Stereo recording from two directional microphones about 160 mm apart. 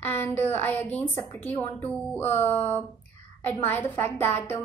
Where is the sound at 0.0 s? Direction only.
15° left (ahead or behind).